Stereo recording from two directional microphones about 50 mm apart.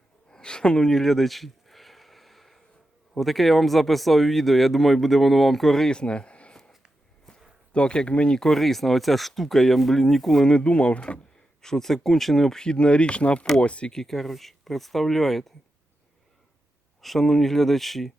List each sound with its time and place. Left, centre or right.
0.3 s a sound: centre
3.2 s speech: centre
5.9 s a sound: centre
7.7 s speech: centre
10.5 s speech: left
11.6 s speech: centre
13.9 s speech: centre
17.0 s speech: centre